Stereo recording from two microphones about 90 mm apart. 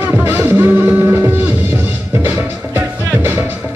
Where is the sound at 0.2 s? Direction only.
25° right (ahead or behind).